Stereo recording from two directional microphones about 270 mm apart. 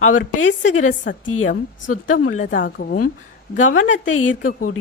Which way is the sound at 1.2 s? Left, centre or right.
Left.